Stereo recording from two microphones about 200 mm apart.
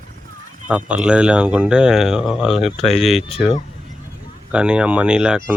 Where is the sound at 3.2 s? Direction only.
30° left (ahead or behind).